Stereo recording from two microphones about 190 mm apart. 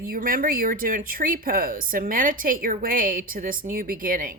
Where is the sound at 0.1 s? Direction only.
50° right (ahead or behind).